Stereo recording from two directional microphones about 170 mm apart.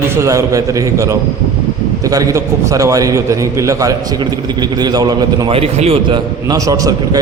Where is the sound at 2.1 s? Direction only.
20° right (ahead or behind); by 6.2 s 40° right (ahead or behind).